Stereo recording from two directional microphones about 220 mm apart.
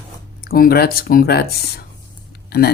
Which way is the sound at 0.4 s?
40° left (ahead or behind).